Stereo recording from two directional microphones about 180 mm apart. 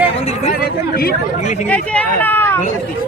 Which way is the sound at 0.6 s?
60° left (ahead or behind).